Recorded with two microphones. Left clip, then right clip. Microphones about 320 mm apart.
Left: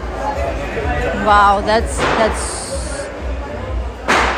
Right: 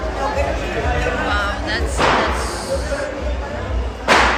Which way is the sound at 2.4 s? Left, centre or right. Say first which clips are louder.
Right 2 dB; centre.